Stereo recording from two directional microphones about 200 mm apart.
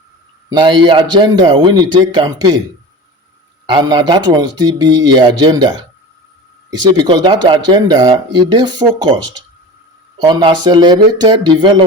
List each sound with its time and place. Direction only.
0.5 s speech: 25° right (ahead or behind)
3.7 s speech: 25° right (ahead or behind)